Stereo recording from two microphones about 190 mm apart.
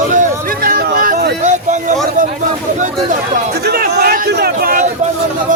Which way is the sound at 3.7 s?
55° right (ahead or behind).